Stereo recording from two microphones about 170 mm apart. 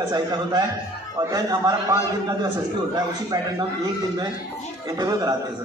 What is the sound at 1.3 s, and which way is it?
A man's voice, 20° right (ahead or behind).